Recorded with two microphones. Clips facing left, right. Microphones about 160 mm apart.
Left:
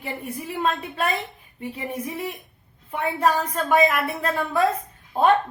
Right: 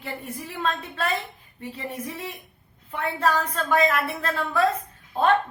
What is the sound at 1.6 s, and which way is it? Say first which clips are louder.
A woman's voice: left 3 dB; 15° left (ahead or behind).